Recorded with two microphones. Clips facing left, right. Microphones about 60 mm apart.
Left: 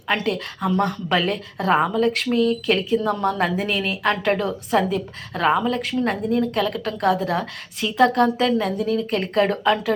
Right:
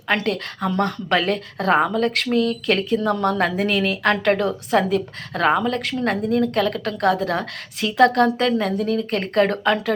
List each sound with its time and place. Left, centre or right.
0.1 s speech: right
8.4 s a woman's voice: right